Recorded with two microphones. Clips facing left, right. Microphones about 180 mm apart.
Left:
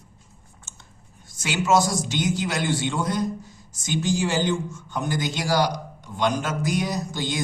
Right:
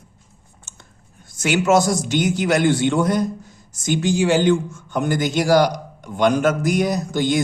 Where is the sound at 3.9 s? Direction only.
65° right (ahead or behind).